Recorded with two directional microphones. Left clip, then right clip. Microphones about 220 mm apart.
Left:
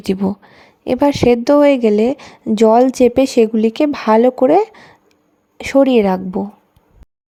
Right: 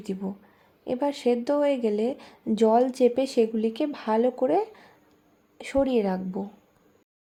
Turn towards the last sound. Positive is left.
turn(degrees=35)  # may be behind; listen again after turning